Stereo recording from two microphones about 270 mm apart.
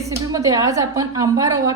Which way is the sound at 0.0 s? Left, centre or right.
Centre.